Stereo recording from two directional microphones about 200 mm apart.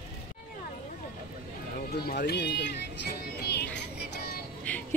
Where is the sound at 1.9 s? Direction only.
50° left (ahead or behind).